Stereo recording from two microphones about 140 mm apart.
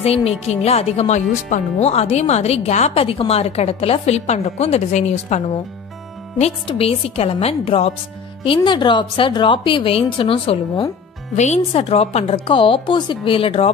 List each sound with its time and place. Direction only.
0.0 s speech: 45° left (ahead or behind)
6.7 s speech: 45° left (ahead or behind)
8.5 s a woman's voice: 35° left (ahead or behind)
11.3 s speech: 50° left (ahead or behind)